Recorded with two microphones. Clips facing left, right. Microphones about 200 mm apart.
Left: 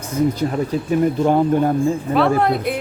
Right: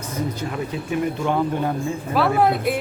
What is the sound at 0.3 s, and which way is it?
Speech, 35° left (ahead or behind).